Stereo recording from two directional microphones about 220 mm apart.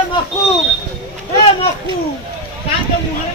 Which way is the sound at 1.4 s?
25° left (ahead or behind).